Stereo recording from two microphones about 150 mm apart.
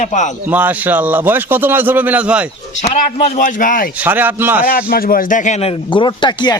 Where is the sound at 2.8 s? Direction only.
50° left (ahead or behind).